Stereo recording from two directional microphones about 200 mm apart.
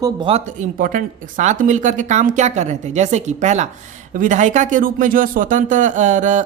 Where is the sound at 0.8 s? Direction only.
40° right (ahead or behind).